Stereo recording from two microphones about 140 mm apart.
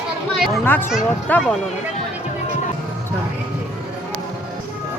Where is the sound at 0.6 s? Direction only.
15° left (ahead or behind).